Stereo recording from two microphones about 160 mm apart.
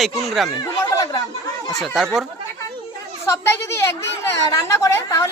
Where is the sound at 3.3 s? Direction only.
15° left (ahead or behind).